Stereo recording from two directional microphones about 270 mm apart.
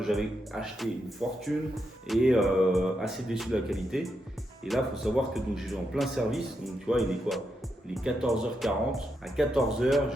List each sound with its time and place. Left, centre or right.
0.0 s speech: centre